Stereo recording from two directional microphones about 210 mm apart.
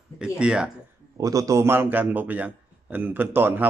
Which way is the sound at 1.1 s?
15° right (ahead or behind).